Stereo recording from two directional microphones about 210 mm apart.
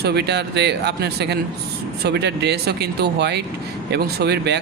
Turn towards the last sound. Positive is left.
turn(degrees=-55)  # may be behind; listen again after turning